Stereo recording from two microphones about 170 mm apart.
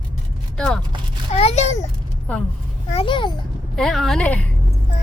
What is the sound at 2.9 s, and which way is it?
Speech, 30° left (ahead or behind).